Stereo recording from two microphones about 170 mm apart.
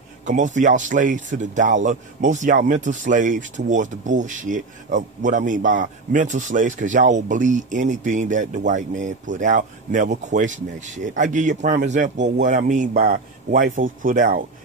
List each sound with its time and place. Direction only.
0.2 s speech: 45° right (ahead or behind)